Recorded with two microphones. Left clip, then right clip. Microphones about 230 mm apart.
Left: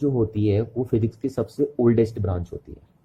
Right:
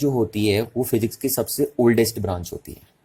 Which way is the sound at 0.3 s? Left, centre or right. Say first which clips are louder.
Right 2 dB; centre.